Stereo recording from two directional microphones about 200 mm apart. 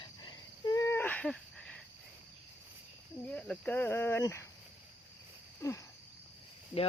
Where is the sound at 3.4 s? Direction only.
5° left (ahead or behind).